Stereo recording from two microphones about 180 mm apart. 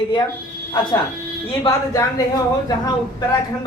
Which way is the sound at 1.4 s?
25° left (ahead or behind).